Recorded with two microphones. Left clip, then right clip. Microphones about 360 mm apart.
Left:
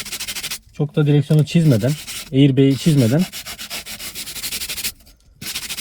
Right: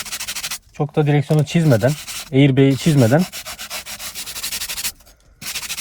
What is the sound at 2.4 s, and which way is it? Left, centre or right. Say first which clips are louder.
Rub: right 1 dB; right.